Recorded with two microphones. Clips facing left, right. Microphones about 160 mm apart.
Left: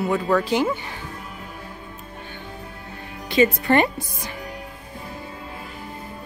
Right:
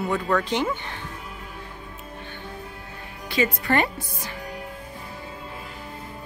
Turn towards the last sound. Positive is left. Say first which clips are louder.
# left 3 dB
turn(degrees=20)  # may be behind; listen again after turning